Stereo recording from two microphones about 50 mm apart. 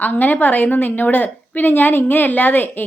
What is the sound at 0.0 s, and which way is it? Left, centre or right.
A woman's voice, left.